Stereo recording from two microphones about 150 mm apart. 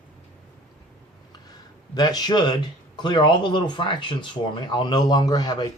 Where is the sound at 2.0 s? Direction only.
25° left (ahead or behind).